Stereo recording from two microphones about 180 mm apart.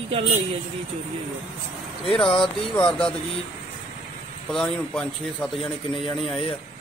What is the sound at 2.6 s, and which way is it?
Speech, 5° left (ahead or behind).